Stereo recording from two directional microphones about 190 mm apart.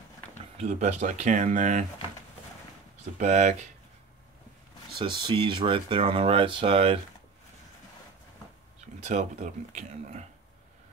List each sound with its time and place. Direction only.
0.6 s speech: 35° right (ahead or behind)
3.2 s speech: 40° right (ahead or behind)
4.9 s speech: 25° right (ahead or behind)
9.0 s speech: 35° right (ahead or behind)